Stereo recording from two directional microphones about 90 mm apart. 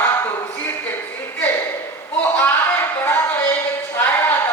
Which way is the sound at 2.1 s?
20° left (ahead or behind).